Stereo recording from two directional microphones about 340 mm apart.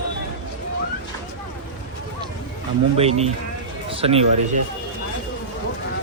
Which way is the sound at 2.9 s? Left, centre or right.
Centre.